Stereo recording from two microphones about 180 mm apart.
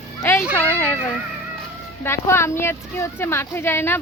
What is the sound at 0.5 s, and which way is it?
Speech, 10° left (ahead or behind).